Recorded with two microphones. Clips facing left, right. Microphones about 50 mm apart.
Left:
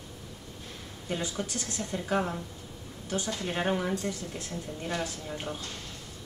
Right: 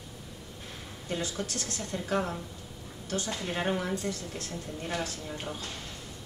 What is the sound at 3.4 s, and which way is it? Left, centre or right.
Speech, centre.